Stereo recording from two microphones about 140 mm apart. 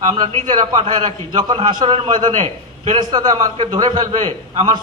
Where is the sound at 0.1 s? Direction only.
30° right (ahead or behind).